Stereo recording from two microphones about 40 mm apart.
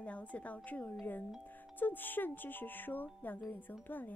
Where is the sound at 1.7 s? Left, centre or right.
Left.